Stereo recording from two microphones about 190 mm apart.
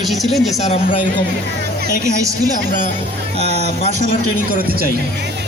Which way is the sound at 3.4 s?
35° right (ahead or behind).